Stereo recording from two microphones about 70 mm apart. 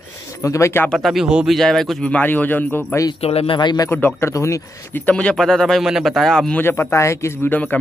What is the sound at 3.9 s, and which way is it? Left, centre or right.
Speech, left.